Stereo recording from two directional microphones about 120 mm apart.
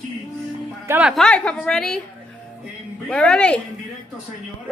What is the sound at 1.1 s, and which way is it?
Speech, 10° left (ahead or behind).